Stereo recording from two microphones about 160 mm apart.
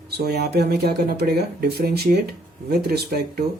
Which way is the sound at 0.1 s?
85° right.